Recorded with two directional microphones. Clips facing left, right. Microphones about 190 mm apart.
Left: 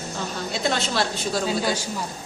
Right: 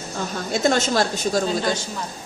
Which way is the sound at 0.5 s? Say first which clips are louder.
Right 6 dB; 45° right (ahead or behind).